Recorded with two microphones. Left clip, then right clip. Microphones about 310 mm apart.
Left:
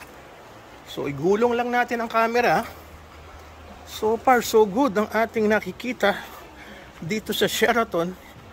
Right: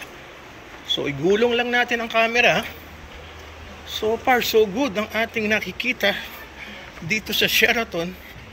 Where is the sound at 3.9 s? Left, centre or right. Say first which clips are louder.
Even; centre.